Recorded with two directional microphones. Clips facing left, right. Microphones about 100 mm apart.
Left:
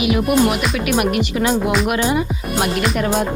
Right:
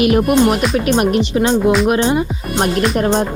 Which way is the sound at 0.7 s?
35° right (ahead or behind).